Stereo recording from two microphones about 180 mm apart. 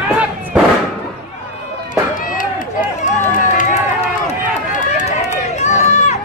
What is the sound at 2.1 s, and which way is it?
Run, 50° left (ahead or behind).